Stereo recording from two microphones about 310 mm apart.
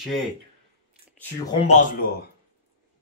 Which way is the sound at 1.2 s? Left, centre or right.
Centre.